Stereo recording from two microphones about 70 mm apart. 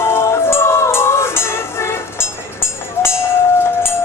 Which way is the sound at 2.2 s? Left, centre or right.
Left.